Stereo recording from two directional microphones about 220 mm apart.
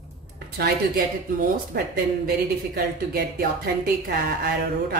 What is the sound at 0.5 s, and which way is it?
Speech, 45° right (ahead or behind).